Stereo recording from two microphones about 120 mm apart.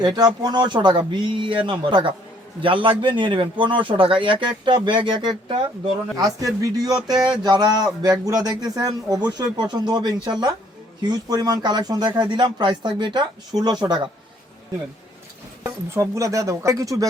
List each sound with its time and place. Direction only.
0.0 s speech: 35° right (ahead or behind)
15.6 s speech: 25° right (ahead or behind)